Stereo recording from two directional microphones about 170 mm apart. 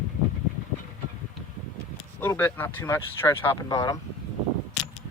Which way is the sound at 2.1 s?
10° left (ahead or behind).